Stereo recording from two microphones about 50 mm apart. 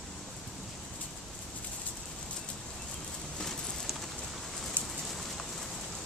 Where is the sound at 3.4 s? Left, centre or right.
Centre.